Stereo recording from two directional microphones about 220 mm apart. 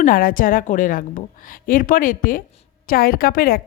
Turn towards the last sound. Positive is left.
turn(degrees=40)  # may be behind; listen again after turning